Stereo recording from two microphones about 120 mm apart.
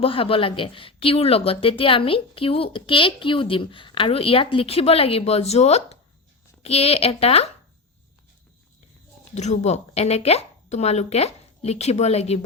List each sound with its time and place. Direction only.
0.0 s speech: 50° left (ahead or behind)
9.3 s speech: 70° left (ahead or behind)